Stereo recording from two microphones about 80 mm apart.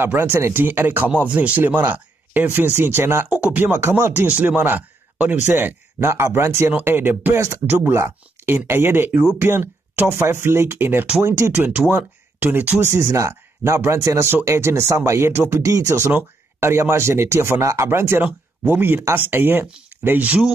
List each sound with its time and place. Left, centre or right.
0.0 s speech: right
3.3 s speech: centre
5.9 s speech: right
12.8 s speech: right